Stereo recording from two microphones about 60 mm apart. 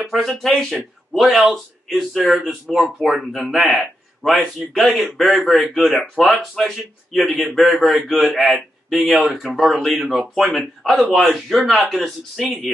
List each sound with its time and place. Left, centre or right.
0.0 s speech: centre